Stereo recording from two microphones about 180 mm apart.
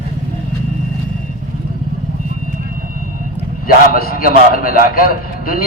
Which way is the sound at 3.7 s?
55° left (ahead or behind).